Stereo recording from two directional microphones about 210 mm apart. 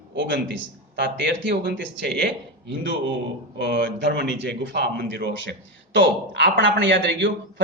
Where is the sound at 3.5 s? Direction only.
50° right (ahead or behind).